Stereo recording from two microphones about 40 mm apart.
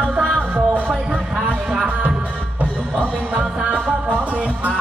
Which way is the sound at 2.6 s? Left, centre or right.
Right.